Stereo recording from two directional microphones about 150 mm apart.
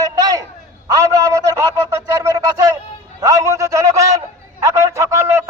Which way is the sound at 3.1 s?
20° right (ahead or behind).